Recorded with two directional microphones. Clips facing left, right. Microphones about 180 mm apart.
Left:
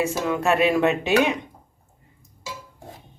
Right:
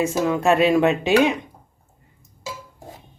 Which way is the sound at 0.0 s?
20° right (ahead or behind).